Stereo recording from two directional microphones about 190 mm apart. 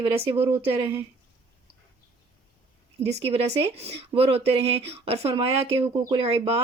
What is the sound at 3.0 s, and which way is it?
Speech, 35° right (ahead or behind).